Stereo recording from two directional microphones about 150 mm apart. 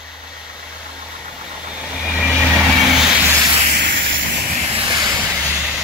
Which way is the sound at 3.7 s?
90° right.